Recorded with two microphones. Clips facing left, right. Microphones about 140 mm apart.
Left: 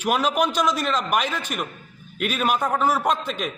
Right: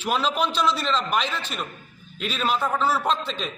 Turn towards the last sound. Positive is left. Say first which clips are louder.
# left 2 dB
turn(degrees=10)  # may be behind; listen again after turning